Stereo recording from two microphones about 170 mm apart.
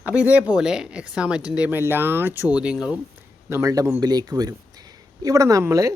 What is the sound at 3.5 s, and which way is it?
Speech, 20° right (ahead or behind).